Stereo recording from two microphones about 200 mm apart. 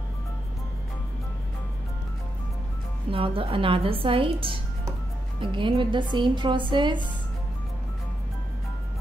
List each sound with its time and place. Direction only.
3.1 s a woman's voice: 30° right (ahead or behind)